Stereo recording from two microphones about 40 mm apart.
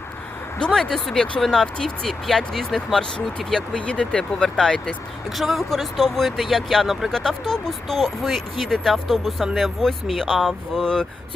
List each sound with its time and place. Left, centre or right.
0.6 s speech: centre
3.8 s speech: left
4.4 s speech: centre
5.4 s speech: centre
7.1 s speech: centre
9.8 s speech: centre
10.8 s speech: centre